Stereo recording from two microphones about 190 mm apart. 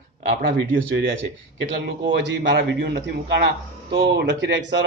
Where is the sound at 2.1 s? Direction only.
65° right (ahead or behind).